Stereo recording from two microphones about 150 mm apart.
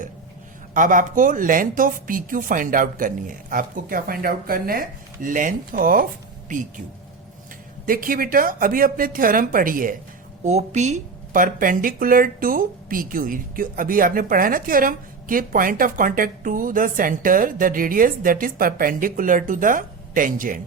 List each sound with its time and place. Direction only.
0.7 s speech: 65° right (ahead or behind)
6.5 s speech: 55° right (ahead or behind)
7.9 s speech: 70° right (ahead or behind)
10.4 s speech: 50° right (ahead or behind)
11.4 s speech: 65° right (ahead or behind)